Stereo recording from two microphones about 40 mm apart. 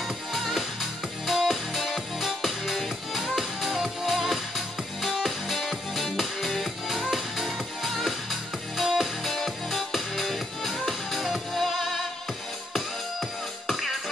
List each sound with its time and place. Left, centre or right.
0.3 s music: centre
13.7 s music: centre